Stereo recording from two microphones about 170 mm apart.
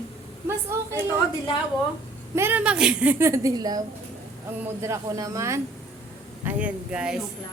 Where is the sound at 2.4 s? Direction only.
10° right (ahead or behind).